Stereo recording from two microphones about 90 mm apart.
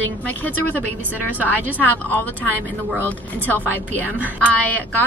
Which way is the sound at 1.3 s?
20° right (ahead or behind).